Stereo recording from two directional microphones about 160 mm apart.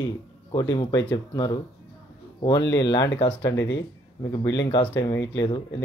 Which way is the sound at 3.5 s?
90° left.